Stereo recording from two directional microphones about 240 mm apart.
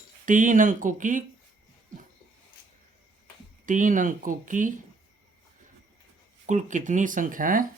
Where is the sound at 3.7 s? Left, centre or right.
Right.